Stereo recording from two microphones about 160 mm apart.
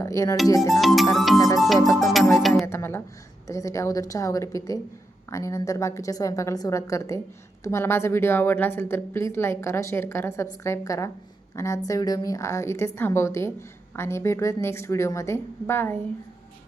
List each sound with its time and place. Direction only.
0.0 s a woman's voice: 20° left (ahead or behind)
0.7 s speech: centre (ahead or behind)
2.6 s a woman's voice: 15° left (ahead or behind)